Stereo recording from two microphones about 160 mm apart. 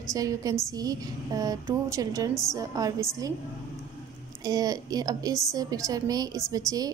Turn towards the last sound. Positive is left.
turn(degrees=-20)  # may be behind; listen again after turning